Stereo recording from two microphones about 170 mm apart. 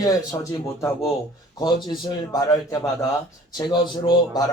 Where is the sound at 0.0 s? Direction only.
20° left (ahead or behind).